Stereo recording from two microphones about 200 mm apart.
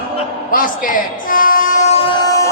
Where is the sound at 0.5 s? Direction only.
45° left (ahead or behind).